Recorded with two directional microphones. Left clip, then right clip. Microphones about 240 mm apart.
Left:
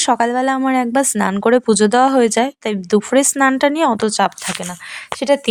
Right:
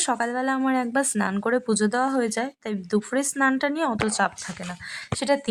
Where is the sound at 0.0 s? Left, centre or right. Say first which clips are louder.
Left 10 dB; left.